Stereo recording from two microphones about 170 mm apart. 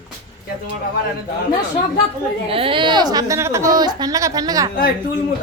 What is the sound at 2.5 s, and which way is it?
A woman's voice, 35° right (ahead or behind).